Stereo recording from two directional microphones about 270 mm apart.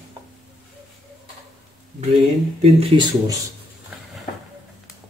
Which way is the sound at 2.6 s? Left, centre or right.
Centre.